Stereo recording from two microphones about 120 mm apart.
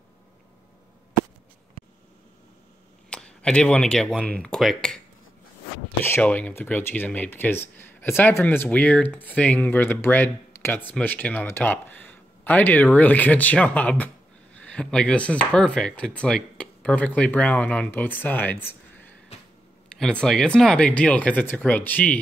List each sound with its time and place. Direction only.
1.8 s a sound: 50° right (ahead or behind)
3.1 s speech: 10° left (ahead or behind)
6.0 s speech: 15° left (ahead or behind)